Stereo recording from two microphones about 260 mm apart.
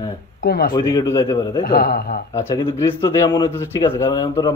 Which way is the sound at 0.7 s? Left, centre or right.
Centre.